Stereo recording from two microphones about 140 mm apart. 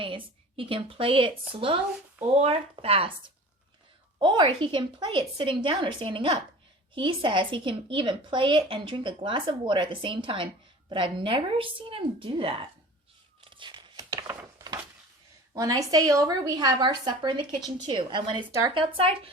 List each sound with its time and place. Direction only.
0.0 s a woman's voice: 40° right (ahead or behind)
4.2 s a woman's voice: 35° right (ahead or behind)
13.4 s crumpling: 35° right (ahead or behind)
15.5 s a woman's voice: 25° right (ahead or behind); by 19.3 s 40° right (ahead or behind)